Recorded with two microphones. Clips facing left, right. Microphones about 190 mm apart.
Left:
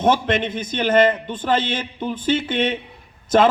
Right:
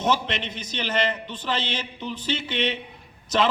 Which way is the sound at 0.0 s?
50° left (ahead or behind).